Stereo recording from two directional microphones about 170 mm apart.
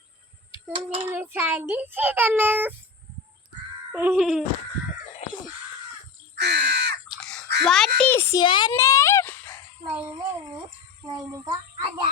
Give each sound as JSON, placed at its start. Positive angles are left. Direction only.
{"t": 0.7, "sound": "child singing", "side_deg": -30}
{"t": 1.1, "sound": "a child's voice", "side_deg": -15}
{"t": 3.9, "sound": "speech", "side_deg": -10}
{"t": 6.3, "sound": "crow", "side_deg": -80}
{"t": 7.1, "sound": "chewing", "side_deg": 5}
{"t": 7.6, "sound": "a child's voice", "side_deg": 5}
{"t": 8.4, "sound": "a woman's voice", "side_deg": 25}
{"t": 8.7, "sound": "dog", "side_deg": 20}
{"t": 11.1, "sound": "a child's voice", "side_deg": -25}